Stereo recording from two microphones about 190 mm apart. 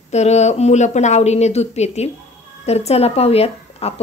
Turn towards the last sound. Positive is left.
turn(degrees=30)  # may be behind; listen again after turning